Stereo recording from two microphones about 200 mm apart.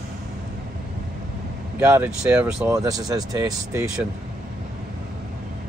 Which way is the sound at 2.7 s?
15° right (ahead or behind).